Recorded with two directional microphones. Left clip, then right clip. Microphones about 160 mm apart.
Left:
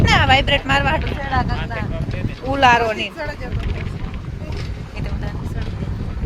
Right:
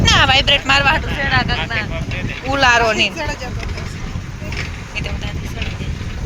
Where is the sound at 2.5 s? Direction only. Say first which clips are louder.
Right 1 dB; 40° left (ahead or behind).